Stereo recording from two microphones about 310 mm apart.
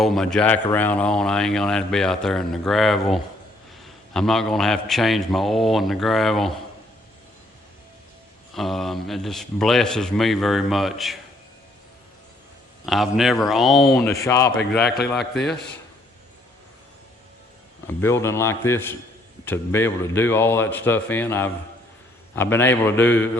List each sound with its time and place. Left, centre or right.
0.0 s speech: centre
8.5 s speech: centre
12.8 s speech: centre
14.8 s speech: left
17.8 s speech: centre